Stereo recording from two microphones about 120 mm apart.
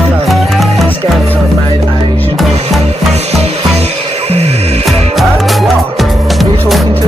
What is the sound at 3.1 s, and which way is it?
Music, 60° right (ahead or behind).